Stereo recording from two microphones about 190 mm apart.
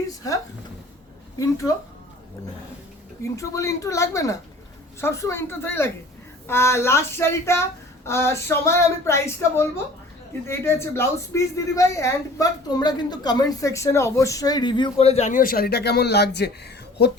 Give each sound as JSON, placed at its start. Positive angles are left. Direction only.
{"t": 3.3, "sound": "a woman's voice", "side_deg": 15}